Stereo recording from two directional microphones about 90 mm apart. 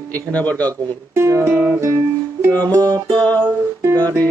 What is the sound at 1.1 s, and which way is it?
Music, 30° right (ahead or behind).